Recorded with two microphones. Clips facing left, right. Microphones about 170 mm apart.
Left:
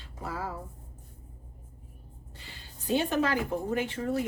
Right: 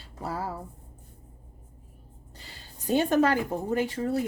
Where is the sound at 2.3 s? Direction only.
40° right (ahead or behind).